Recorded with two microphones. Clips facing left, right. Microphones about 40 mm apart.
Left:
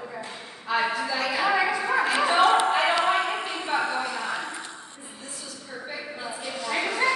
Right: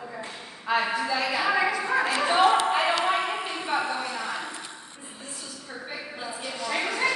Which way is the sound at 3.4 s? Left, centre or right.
Centre.